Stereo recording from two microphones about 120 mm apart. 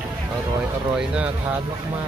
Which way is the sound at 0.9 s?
10° right (ahead or behind).